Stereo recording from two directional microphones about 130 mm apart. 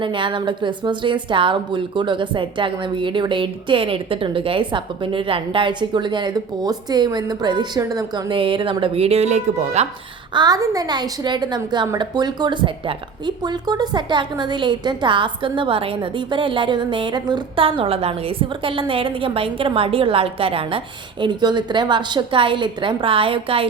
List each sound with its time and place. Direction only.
0.0 s a woman's voice: 40° right (ahead or behind); by 9.8 s 55° right (ahead or behind)
10.3 s a woman's voice: 30° right (ahead or behind)